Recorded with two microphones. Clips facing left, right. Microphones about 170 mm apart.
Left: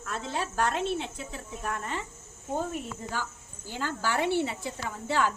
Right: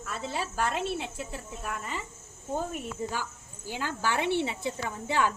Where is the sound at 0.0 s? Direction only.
5° right (ahead or behind).